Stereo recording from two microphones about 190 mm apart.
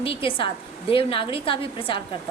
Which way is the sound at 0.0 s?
30° left (ahead or behind).